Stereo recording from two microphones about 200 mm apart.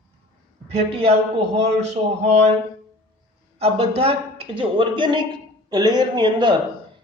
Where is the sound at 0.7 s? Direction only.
30° right (ahead or behind).